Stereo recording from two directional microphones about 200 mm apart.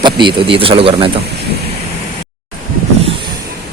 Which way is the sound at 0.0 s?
25° right (ahead or behind).